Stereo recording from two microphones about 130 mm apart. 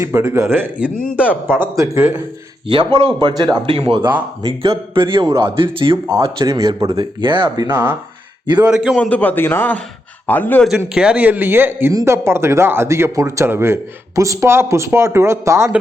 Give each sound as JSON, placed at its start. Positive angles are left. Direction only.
{"t": 0.0, "sound": "speech", "side_deg": -20}
{"t": 2.6, "sound": "speech", "side_deg": -40}
{"t": 6.2, "sound": "speech", "side_deg": -30}
{"t": 7.7, "sound": "speech", "side_deg": -15}
{"t": 8.6, "sound": "a man's voice", "side_deg": -5}
{"t": 9.0, "sound": "a man's voice", "side_deg": 10}
{"t": 10.9, "sound": "speech", "side_deg": -10}